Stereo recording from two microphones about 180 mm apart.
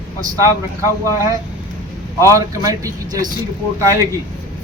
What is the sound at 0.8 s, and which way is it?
A man's voice, 20° right (ahead or behind).